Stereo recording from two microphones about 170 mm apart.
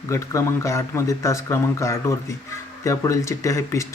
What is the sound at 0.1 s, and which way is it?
Speech, 15° left (ahead or behind).